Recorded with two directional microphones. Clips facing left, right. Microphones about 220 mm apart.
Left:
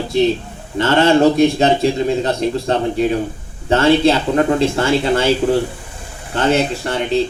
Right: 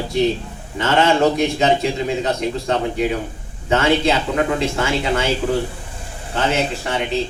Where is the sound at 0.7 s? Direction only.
35° left (ahead or behind).